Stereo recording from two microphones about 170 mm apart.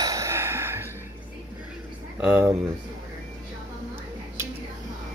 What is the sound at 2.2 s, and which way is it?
Speech, 10° right (ahead or behind).